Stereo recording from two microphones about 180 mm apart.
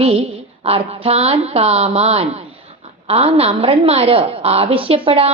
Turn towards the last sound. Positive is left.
turn(degrees=-30)  # may be behind; listen again after turning